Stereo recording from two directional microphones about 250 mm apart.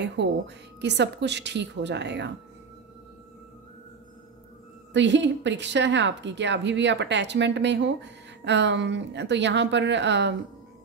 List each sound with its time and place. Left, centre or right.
0.0 s a woman's voice: right
4.9 s a woman's voice: right